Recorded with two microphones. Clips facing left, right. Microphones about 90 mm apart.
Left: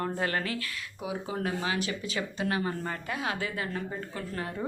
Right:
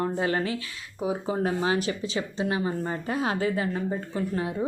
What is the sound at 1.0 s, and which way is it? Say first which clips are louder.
A woman's voice: right 6 dB; 35° right (ahead or behind).